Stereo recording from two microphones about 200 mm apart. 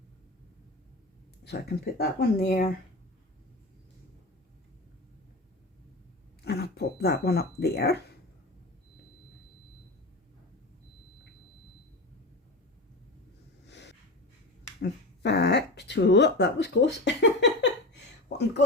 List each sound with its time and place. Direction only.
1.5 s speech: 55° left (ahead or behind)
6.4 s a sound: 55° left (ahead or behind)
13.7 s snort: 60° left (ahead or behind)
14.8 s speech: 55° left (ahead or behind)